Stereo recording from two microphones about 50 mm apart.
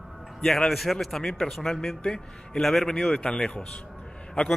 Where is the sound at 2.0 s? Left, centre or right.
Centre.